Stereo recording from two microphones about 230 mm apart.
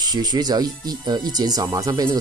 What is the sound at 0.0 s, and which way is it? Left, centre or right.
Speech, centre.